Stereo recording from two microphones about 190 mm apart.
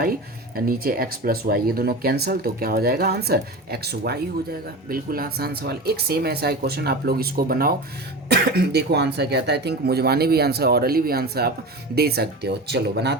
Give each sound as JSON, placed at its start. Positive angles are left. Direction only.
{"t": 0.0, "sound": "speech", "side_deg": -50}